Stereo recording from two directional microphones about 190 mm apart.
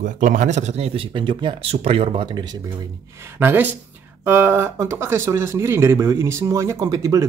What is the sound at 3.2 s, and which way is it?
Speech, 10° right (ahead or behind).